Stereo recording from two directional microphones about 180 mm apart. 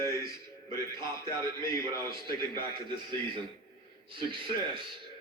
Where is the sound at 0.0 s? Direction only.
15° left (ahead or behind).